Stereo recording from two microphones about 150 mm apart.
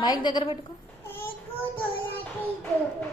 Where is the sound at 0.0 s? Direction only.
30° left (ahead or behind).